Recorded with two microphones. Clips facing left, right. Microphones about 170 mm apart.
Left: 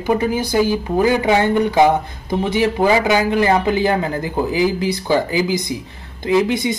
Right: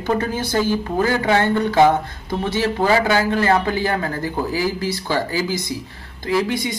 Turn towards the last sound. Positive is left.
turn(degrees=20)  # may be behind; listen again after turning